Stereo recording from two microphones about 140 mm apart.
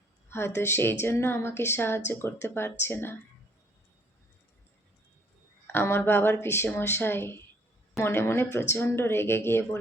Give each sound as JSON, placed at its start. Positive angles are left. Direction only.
{"t": 0.3, "sound": "speech", "side_deg": 15}
{"t": 5.6, "sound": "speech", "side_deg": 15}